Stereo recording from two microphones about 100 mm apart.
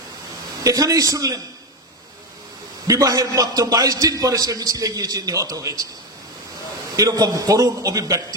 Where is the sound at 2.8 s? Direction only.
35° right (ahead or behind).